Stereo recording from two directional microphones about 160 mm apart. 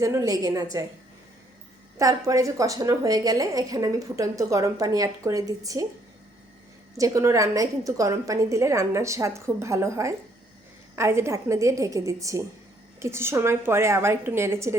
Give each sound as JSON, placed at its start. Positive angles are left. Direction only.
{"t": 0.0, "sound": "a woman's voice", "side_deg": -20}
{"t": 2.0, "sound": "a woman's voice", "side_deg": -20}
{"t": 6.9, "sound": "a woman's voice", "side_deg": -20}